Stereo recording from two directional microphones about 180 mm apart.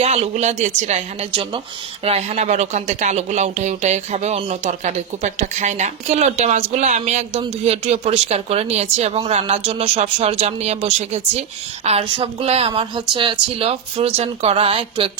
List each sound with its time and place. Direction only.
0.0 s speech: 35° right (ahead or behind)